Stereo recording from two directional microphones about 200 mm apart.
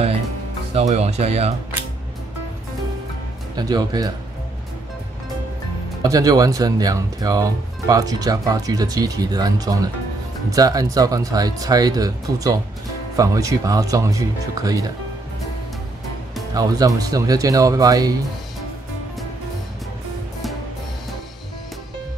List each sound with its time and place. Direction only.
0.7 s speech: 30° right (ahead or behind)
3.5 s speech: 20° right (ahead or behind)
6.0 s speech: 20° right (ahead or behind)
16.5 s speech: 15° right (ahead or behind)